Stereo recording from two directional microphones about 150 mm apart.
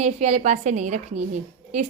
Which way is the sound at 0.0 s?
50° right (ahead or behind).